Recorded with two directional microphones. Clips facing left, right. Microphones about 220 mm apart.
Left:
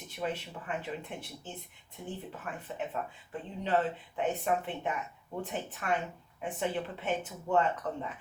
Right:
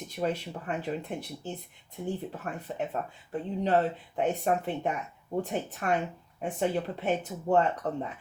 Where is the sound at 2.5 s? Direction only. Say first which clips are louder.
Right 4 dB; 45° right (ahead or behind).